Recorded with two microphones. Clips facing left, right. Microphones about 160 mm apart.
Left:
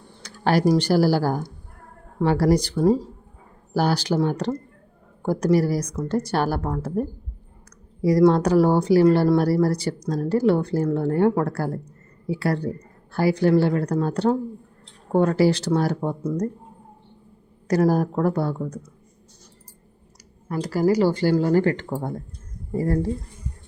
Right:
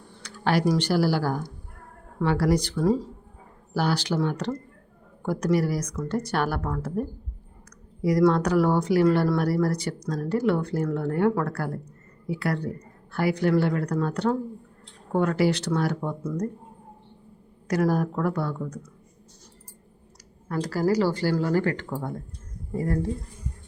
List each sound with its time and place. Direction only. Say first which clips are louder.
0.2 s computer keyboard: left 3 dB; 40° left (ahead or behind)
0.7 s speech: left 4 dB; 40° left (ahead or behind)
8.0 s speech: left 4 dB; 30° left (ahead or behind)
17.7 s speech: left 4 dB; 35° left (ahead or behind)
20.5 s speech: left 3 dB; 15° left (ahead or behind); by 23.0 s 30° left (ahead or behind)